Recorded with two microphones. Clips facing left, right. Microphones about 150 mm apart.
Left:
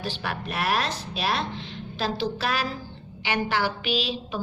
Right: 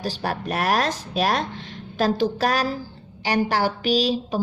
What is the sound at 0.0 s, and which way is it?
Speech, 40° right (ahead or behind).